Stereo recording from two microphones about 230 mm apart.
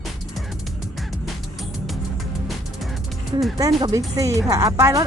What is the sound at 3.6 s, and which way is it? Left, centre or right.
Speech, centre.